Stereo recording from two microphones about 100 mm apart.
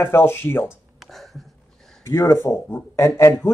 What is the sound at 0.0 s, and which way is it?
Speech, 25° left (ahead or behind).